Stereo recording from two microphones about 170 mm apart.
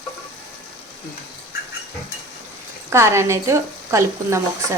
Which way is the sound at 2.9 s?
15° right (ahead or behind).